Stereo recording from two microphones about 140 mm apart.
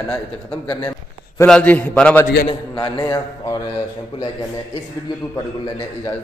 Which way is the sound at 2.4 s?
35° left (ahead or behind).